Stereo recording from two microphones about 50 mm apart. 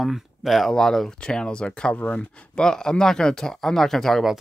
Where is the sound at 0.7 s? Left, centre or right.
Centre.